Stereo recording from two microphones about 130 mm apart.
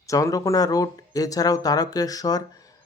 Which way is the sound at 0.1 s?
25° left (ahead or behind).